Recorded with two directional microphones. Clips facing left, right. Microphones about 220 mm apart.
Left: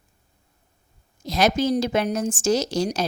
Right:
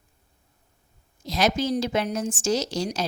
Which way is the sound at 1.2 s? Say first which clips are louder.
Left 3 dB; 50° left (ahead or behind).